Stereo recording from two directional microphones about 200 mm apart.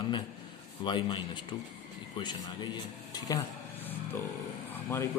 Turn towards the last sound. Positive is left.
turn(degrees=15)  # may be behind; listen again after turning